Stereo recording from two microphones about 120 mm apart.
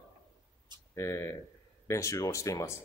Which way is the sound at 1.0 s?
25° left (ahead or behind).